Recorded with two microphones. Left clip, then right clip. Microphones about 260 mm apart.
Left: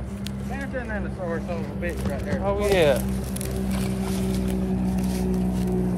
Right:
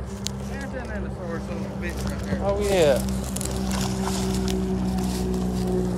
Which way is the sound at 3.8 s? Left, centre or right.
Centre.